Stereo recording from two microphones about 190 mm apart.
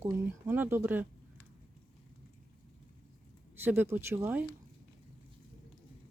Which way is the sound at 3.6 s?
10° right (ahead or behind).